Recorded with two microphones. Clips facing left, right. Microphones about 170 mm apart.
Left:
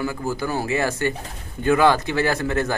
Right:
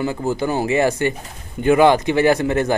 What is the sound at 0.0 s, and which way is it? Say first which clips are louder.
A man's voice: right 4 dB; 25° right (ahead or behind).